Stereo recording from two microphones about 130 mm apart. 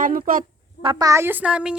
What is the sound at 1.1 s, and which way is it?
Speech, 20° right (ahead or behind).